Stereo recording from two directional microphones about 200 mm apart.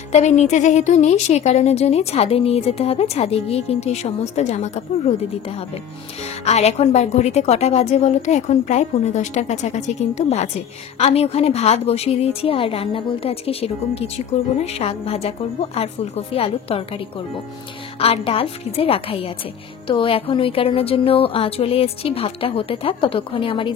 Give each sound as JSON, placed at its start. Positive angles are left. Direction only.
{"t": 0.1, "sound": "a woman's voice", "side_deg": 35}
{"t": 6.4, "sound": "a woman's voice", "side_deg": 30}